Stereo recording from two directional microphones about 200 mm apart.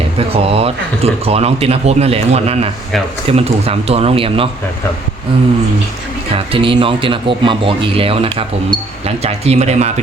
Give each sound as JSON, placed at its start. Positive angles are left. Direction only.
{"t": 0.4, "sound": "speech", "side_deg": -30}
{"t": 6.5, "sound": "speech", "side_deg": -25}